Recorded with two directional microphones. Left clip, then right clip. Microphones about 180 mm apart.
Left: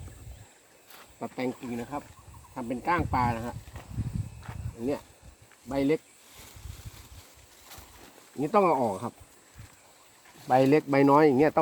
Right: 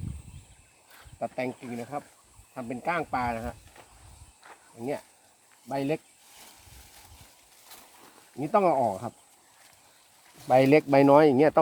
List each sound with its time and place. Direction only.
1.2 s speech: 20° right (ahead or behind)
4.4 s a sound: 55° left (ahead or behind)
5.6 s speech: 20° right (ahead or behind)
8.4 s speech: 15° right (ahead or behind)
10.5 s speech: 40° right (ahead or behind); by 11.6 s 25° right (ahead or behind)